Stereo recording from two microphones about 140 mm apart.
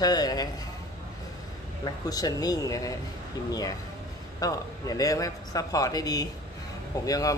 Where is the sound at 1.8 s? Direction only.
25° left (ahead or behind).